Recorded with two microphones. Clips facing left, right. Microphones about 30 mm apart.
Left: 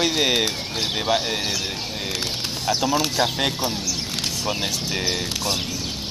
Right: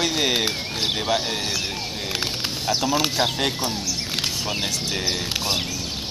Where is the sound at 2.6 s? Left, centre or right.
Centre.